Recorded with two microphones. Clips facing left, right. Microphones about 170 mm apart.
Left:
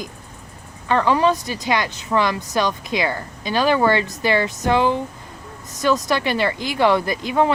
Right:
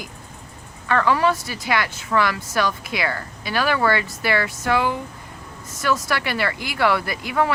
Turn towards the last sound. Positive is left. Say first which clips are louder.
# left 3 dB
turn(degrees=20)  # may be behind; listen again after turning